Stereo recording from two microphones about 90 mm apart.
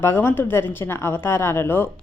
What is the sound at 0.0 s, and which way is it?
A woman's voice, 25° left (ahead or behind).